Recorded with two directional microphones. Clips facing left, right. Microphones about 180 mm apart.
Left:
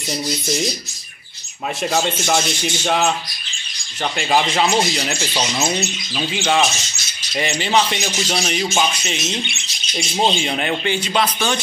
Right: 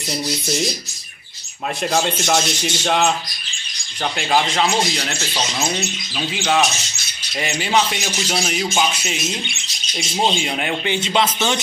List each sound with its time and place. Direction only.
1.8 s speech: centre (ahead or behind)
4.2 s speech: 5° left (ahead or behind)
10.9 s speech: 20° right (ahead or behind)